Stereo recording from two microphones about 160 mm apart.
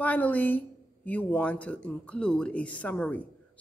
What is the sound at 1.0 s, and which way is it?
A man's voice, 10° left (ahead or behind).